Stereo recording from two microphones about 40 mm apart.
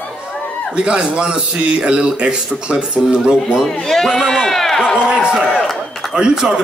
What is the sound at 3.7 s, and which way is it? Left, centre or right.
Speech, centre.